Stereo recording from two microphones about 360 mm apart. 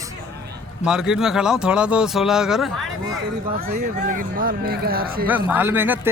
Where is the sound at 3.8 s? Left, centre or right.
Right.